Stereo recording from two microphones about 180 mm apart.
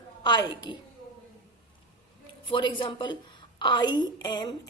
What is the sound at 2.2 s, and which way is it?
A woman's voice, 25° left (ahead or behind).